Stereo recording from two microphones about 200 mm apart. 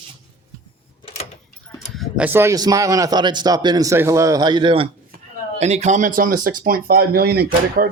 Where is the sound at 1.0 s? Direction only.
30° left (ahead or behind).